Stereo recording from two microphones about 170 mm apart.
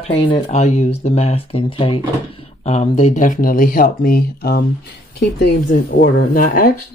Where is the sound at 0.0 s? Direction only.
30° left (ahead or behind); by 4.6 s 60° left (ahead or behind).